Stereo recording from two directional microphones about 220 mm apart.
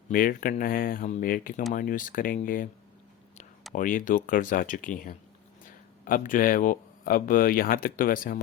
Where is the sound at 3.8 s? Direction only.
35° left (ahead or behind).